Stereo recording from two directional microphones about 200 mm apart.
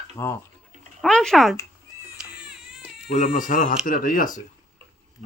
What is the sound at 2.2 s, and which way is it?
Baby cry, 5° right (ahead or behind).